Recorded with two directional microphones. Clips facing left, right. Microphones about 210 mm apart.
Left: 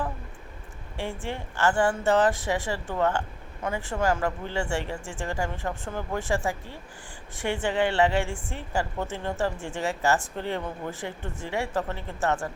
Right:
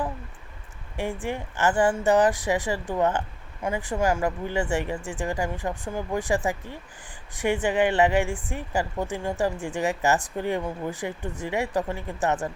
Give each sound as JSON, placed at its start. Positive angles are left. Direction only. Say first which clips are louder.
{"t": 0.9, "sound": "a woman's voice", "louder": "right 3 dB", "side_deg": -15}